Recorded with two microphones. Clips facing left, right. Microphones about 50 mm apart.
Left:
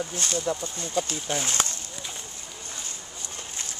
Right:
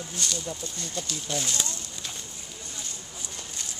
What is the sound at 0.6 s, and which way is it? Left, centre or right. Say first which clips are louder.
Speech: left 6 dB; left.